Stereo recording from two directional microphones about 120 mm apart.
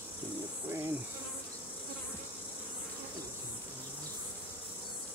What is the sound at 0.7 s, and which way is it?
Insect, 20° right (ahead or behind).